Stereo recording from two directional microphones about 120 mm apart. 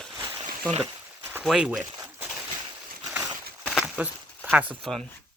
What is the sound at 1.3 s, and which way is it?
Speech, 5° right (ahead or behind).